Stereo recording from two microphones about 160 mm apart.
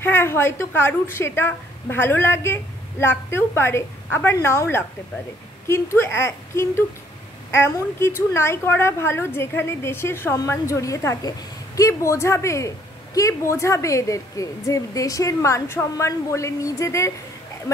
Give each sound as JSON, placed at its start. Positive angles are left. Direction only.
{"t": 0.0, "sound": "a woman's voice", "side_deg": 15}